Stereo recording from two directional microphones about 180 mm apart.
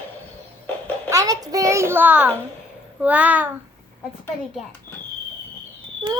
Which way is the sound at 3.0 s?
10° right (ahead or behind).